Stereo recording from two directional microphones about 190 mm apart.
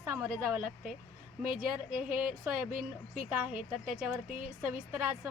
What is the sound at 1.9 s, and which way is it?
Speech, 45° right (ahead or behind).